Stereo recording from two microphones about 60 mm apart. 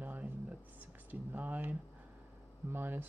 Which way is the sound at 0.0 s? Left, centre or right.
Right.